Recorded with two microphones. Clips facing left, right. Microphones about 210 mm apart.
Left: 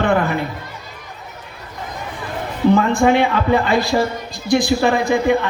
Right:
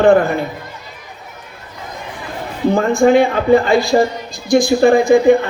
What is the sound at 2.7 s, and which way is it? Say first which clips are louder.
A man's voice: right 4 dB; 50° right (ahead or behind).